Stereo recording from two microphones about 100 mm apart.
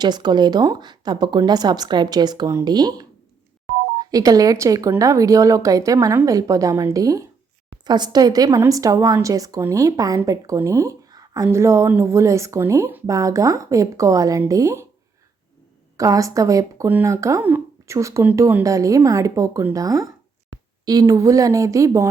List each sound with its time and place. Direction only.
0.0 s a woman's voice: 45° right (ahead or behind)
7.9 s a woman's voice: 45° right (ahead or behind)
16.0 s a woman's voice: 35° right (ahead or behind)